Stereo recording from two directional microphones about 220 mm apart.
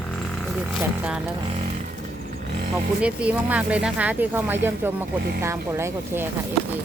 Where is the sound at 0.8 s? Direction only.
5° right (ahead or behind).